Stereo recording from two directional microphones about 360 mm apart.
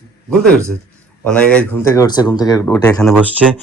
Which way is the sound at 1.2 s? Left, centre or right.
Centre.